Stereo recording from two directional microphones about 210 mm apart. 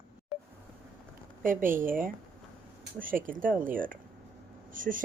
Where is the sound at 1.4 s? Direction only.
40° right (ahead or behind).